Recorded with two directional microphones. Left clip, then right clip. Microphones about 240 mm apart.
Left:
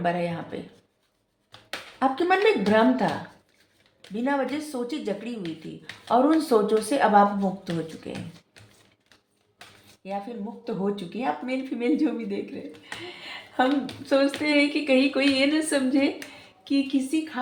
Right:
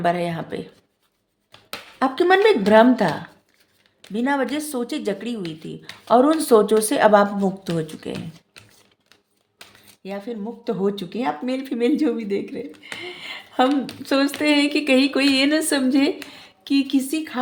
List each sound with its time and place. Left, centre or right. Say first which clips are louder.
0.0 s speech: right 5 dB; right
2.0 s speech: right 5 dB; right
4.1 s speech: right 4 dB; right
5.4 s speech: right 4 dB; centre
6.1 s speech: right 5 dB; right
10.0 s speech: right 2 dB; right
13.6 s speech: right 4 dB; right